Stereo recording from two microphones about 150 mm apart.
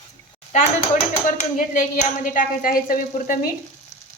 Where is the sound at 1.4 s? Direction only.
60° left (ahead or behind).